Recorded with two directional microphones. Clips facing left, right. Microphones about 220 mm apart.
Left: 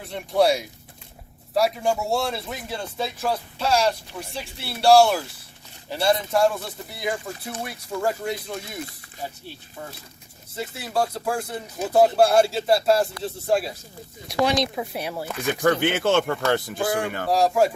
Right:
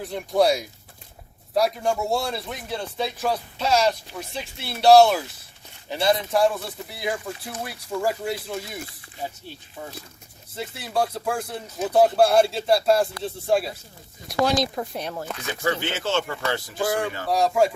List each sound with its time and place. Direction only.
0.0 s speech: centre (ahead or behind)
10.6 s speech: centre (ahead or behind)
15.6 s speech: 55° left (ahead or behind)
17.2 s speech: centre (ahead or behind)